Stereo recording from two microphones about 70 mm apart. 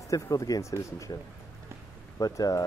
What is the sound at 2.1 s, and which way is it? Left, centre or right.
Speech, left.